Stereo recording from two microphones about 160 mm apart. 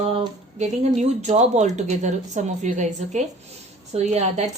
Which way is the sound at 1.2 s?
45° right (ahead or behind).